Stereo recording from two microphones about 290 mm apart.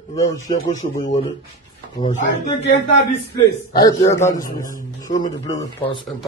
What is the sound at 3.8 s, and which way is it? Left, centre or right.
A man's voice, centre.